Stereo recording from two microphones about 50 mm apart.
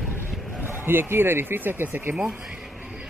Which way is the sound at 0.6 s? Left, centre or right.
Right.